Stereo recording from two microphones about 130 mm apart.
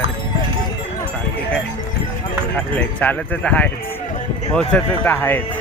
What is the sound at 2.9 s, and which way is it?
Speech, 10° left (ahead or behind).